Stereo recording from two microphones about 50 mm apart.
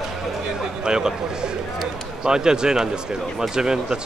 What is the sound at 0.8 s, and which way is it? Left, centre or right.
A man's voice, centre.